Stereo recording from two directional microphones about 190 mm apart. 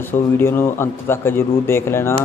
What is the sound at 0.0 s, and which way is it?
A man's voice, 10° left (ahead or behind).